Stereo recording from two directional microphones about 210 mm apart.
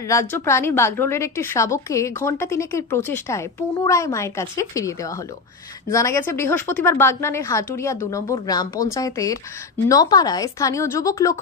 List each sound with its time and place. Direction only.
0.0 s a woman's voice: 15° left (ahead or behind)